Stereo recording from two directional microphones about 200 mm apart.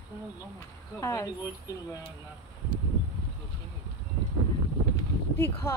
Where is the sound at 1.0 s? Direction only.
15° left (ahead or behind).